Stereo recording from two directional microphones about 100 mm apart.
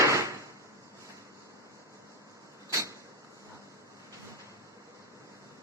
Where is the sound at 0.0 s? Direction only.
30° right (ahead or behind).